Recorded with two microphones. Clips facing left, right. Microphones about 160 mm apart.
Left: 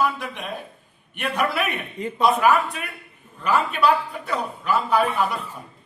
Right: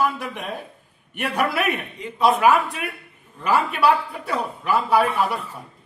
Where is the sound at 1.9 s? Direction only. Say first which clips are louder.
Left 5 dB; 45° left (ahead or behind).